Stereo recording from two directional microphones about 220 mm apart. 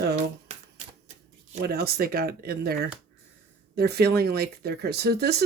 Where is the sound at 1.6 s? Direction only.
45° right (ahead or behind).